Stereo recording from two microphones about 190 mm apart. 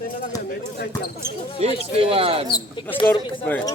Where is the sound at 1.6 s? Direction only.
35° right (ahead or behind).